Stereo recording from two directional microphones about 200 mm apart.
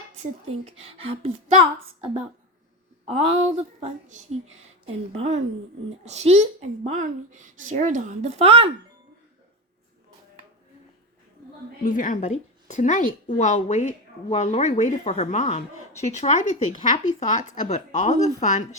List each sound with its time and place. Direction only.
0.2 s speech: 30° right (ahead or behind)
3.1 s speech: 30° right (ahead or behind)
11.8 s a woman's voice: 45° left (ahead or behind)